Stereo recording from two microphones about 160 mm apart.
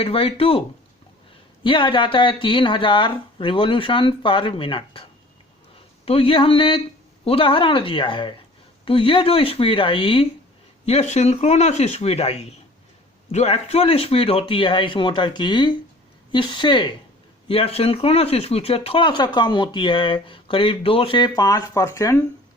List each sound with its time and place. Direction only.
0.0 s speech: 35° left (ahead or behind)
1.6 s speech: 30° left (ahead or behind)
6.1 s speech: 35° left (ahead or behind); by 22.3 s 20° left (ahead or behind)